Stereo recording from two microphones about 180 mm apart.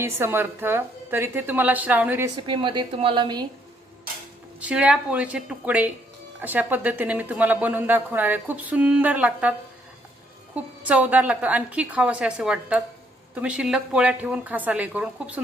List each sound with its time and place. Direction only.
0.0 s speech: 15° right (ahead or behind)
2.3 s a woman's voice: 25° right (ahead or behind)
4.6 s speech: 5° right (ahead or behind)